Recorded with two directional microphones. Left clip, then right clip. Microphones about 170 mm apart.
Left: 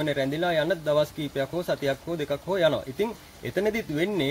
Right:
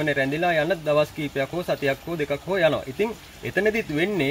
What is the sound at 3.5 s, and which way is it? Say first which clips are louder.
Speech: right 4 dB; centre (ahead or behind).